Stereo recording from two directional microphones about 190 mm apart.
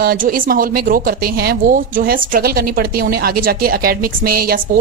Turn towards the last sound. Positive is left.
turn(degrees=-50)  # may be behind; listen again after turning